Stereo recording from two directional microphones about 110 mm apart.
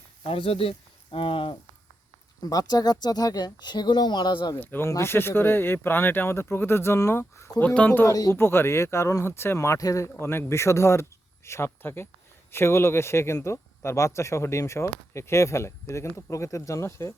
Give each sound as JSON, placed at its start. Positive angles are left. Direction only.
{"t": 0.2, "sound": "speech", "side_deg": 55}
{"t": 2.4, "sound": "speech", "side_deg": 35}
{"t": 4.5, "sound": "speech", "side_deg": 20}
{"t": 7.7, "sound": "speech", "side_deg": 15}